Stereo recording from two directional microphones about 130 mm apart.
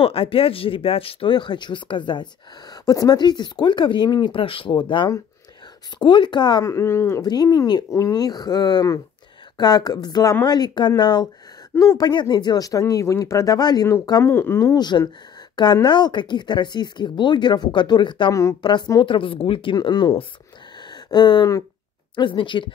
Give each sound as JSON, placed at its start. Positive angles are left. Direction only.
{"t": 0.0, "sound": "speech", "side_deg": 45}
{"t": 6.6, "sound": "speech", "side_deg": 20}
{"t": 7.2, "sound": "speech", "side_deg": 30}
{"t": 11.7, "sound": "speech", "side_deg": 20}
{"t": 12.1, "sound": "speech", "side_deg": 35}
{"t": 14.2, "sound": "speech", "side_deg": 20}
{"t": 18.3, "sound": "speech", "side_deg": 25}
{"t": 20.8, "sound": "a sound", "side_deg": 35}
{"t": 22.1, "sound": "speech", "side_deg": 40}